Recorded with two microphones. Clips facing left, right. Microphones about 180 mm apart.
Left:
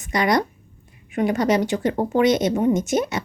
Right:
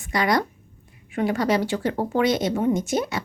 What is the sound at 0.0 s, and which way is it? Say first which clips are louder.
Speech: left 2 dB; 20° left (ahead or behind).